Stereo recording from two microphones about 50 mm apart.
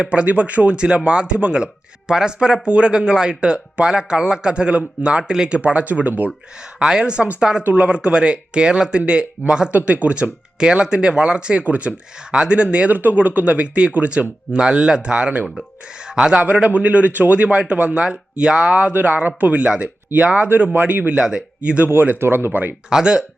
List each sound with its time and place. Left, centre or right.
0.0 s speech: right
6.6 s speech: centre
9.7 s speech: right
11.6 s speech: right
12.3 s speech: centre
12.9 s speech: right
19.0 s speech: right
21.1 s speech: centre
22.2 s speech: right
22.9 s speech: centre